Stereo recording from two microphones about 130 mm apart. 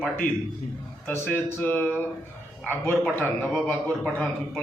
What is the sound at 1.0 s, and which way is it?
Speech, 15° left (ahead or behind).